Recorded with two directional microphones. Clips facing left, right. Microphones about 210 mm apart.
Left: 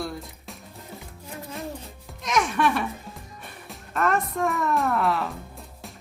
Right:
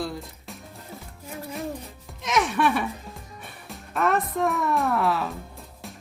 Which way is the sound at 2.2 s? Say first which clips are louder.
Even; centre (ahead or behind).